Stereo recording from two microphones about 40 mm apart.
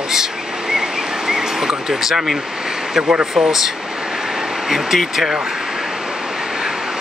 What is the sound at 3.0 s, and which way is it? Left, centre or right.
Speech, right.